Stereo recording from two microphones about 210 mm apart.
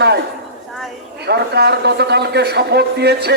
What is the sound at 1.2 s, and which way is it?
A man's voice, 50° right (ahead or behind).